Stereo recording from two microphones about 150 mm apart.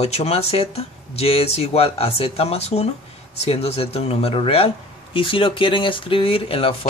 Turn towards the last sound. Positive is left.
turn(degrees=35)  # may be behind; listen again after turning